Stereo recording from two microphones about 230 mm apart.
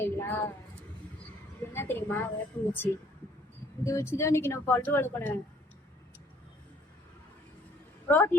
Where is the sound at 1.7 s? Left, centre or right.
Centre.